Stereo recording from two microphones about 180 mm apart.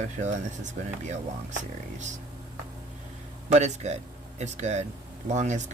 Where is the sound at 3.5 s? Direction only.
40° right (ahead or behind).